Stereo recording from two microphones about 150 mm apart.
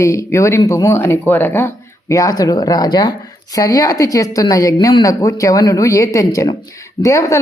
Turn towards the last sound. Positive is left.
turn(degrees=20)  # may be behind; listen again after turning